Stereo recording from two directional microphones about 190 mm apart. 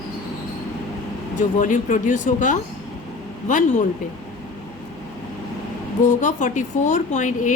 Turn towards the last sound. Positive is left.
turn(degrees=40)  # may be behind; listen again after turning